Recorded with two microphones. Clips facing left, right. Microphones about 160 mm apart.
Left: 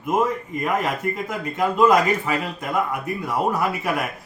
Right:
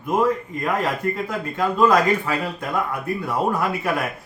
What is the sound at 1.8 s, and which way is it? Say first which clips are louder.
Speech: even; 15° left (ahead or behind).